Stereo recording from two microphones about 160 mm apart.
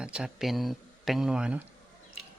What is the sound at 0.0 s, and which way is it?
Speech, 5° right (ahead or behind).